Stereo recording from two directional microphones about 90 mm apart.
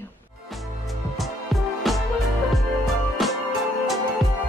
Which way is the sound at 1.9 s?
Centre (ahead or behind).